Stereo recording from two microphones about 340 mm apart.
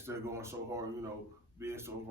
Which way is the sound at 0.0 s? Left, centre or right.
Centre.